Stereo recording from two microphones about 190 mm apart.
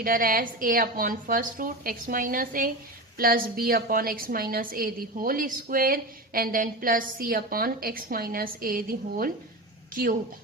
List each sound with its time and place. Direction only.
0.0 s a woman's voice: 50° right (ahead or behind)